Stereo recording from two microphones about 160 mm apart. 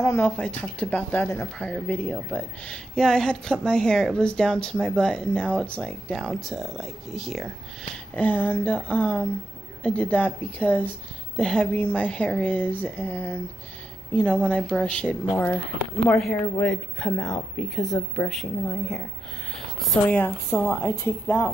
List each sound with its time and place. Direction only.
0.0 s speech: 15° left (ahead or behind)
8.1 s a woman's voice: 10° left (ahead or behind)